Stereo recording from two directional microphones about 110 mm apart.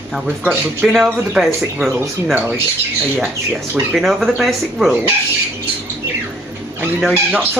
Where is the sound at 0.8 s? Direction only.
Centre (ahead or behind).